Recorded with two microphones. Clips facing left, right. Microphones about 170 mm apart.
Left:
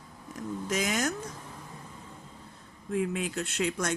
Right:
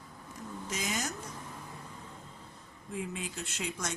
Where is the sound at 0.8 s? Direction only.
75° left (ahead or behind).